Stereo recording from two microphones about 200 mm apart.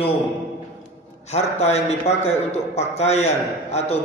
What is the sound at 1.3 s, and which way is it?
A man's voice, 30° left (ahead or behind).